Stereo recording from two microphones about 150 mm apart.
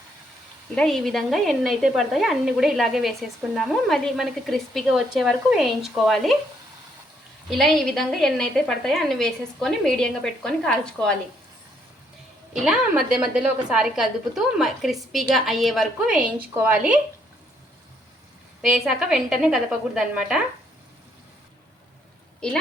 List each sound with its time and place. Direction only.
0.8 s speech: centre (ahead or behind)
7.5 s speech: centre (ahead or behind)
13.1 s speech: 5° right (ahead or behind)
18.6 s speech: 5° right (ahead or behind)
22.4 s speech: 5° left (ahead or behind)